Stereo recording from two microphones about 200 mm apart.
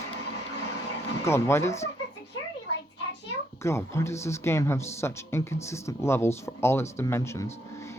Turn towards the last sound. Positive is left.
turn(degrees=15)  # may be behind; listen again after turning